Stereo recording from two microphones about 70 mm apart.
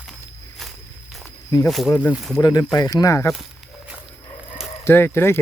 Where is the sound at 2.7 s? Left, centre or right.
Left.